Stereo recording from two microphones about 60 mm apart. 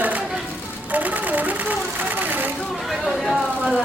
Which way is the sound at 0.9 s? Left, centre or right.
Right.